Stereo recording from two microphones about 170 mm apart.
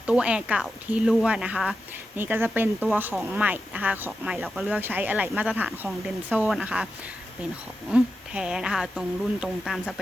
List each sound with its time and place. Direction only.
0.0 s speech: 5° right (ahead or behind)
7.9 s speech: 5° right (ahead or behind)